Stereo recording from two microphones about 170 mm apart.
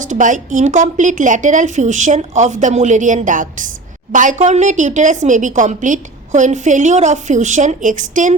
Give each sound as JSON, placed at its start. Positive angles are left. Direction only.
{"t": 0.0, "sound": "a woman's voice", "side_deg": -50}